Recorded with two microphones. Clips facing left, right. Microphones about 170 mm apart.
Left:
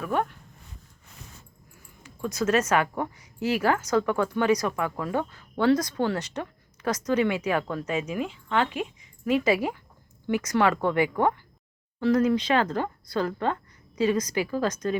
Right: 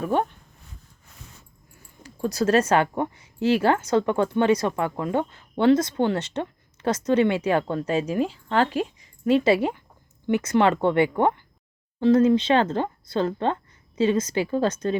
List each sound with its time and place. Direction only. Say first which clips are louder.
0.0 s speech: right 3 dB; 30° right (ahead or behind)
2.0 s speech: right 3 dB; 35° right (ahead or behind)